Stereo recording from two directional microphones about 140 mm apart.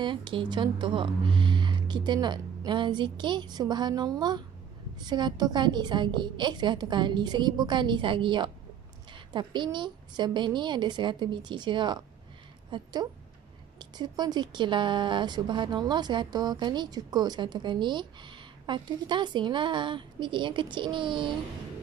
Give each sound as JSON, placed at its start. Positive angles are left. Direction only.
{"t": 0.0, "sound": "speech", "side_deg": -35}